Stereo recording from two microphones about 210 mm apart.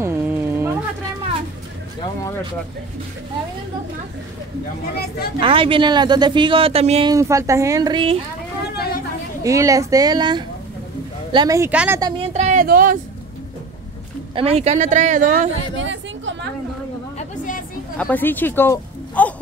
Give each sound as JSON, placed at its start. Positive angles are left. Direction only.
{"t": 0.0, "sound": "a sound", "side_deg": -10}
{"t": 2.0, "sound": "a sound", "side_deg": 15}
{"t": 4.9, "sound": "speech", "side_deg": 45}
{"t": 5.4, "sound": "speech", "side_deg": -25}
{"t": 7.1, "sound": "a woman's voice", "side_deg": -15}
{"t": 9.4, "sound": "a woman's voice", "side_deg": -15}
{"t": 12.0, "sound": "a woman's voice", "side_deg": -30}
{"t": 14.3, "sound": "a woman's voice", "side_deg": -30}
{"t": 15.8, "sound": "speech", "side_deg": -60}
{"t": 17.9, "sound": "speech", "side_deg": 5}